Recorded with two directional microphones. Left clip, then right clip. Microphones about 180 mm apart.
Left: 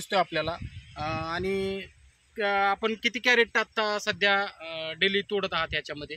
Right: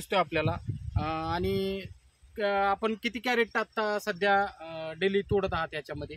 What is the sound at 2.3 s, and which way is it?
Speech, 75° right (ahead or behind).